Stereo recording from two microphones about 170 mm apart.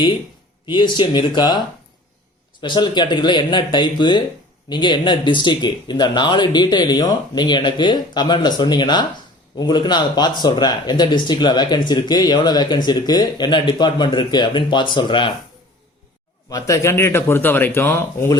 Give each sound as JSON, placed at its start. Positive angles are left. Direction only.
{"t": 0.6, "sound": "speech", "side_deg": 25}
{"t": 2.6, "sound": "speech", "side_deg": 25}
{"t": 16.5, "sound": "a man's voice", "side_deg": 20}